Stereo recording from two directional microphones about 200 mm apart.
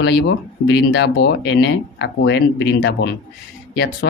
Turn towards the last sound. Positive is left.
turn(degrees=55)  # may be behind; listen again after turning